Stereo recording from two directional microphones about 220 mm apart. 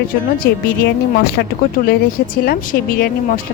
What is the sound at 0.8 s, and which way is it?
Speech, 50° left (ahead or behind).